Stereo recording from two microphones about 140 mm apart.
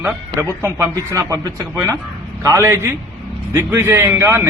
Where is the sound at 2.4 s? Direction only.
20° right (ahead or behind).